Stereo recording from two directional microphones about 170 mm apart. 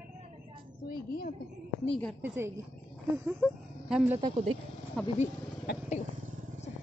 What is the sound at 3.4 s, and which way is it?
Speech, 5° right (ahead or behind).